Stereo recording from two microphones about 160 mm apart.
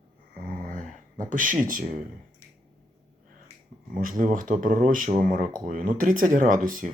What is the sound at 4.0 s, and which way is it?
Speech, 55° right (ahead or behind).